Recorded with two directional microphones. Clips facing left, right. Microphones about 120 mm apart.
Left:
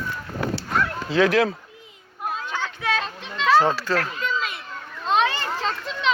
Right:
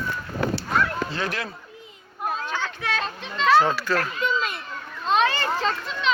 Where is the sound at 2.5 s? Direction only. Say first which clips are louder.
Left 2 dB; 15° left (ahead or behind).